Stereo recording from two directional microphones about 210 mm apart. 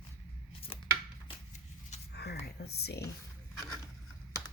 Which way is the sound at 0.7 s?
25° left (ahead or behind).